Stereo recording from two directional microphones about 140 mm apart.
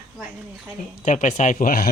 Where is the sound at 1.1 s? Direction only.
60° left (ahead or behind); by 1.9 s 90° left.